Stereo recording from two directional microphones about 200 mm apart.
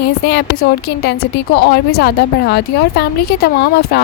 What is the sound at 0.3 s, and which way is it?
A woman's voice, 55° left (ahead or behind).